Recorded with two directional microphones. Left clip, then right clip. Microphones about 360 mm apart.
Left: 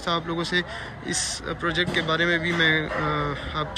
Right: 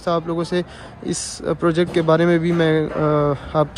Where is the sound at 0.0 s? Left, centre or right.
Centre.